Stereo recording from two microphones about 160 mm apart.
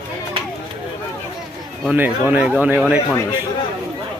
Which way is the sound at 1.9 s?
10° right (ahead or behind).